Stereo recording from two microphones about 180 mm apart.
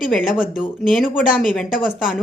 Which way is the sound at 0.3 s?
5° right (ahead or behind).